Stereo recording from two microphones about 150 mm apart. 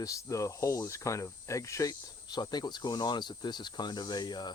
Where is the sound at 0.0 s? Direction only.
20° left (ahead or behind).